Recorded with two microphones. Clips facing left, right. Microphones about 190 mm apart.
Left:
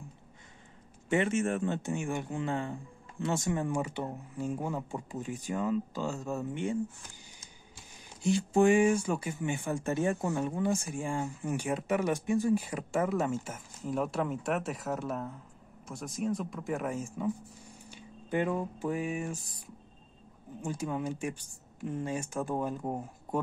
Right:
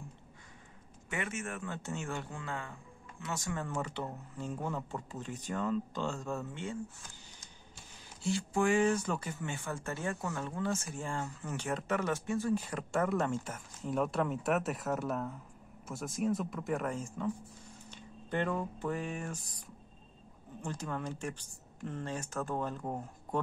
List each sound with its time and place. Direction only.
1.0 s speech: 25° left (ahead or behind)
1.8 s speech: 15° left (ahead or behind)
8.2 s speech: 20° left (ahead or behind)
17.8 s a sound: 10° left (ahead or behind)
20.6 s speech: 10° left (ahead or behind)